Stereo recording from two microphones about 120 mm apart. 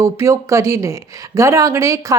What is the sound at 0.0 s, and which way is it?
Speech, 25° right (ahead or behind).